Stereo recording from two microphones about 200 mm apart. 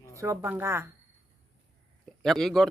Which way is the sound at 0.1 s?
15° right (ahead or behind).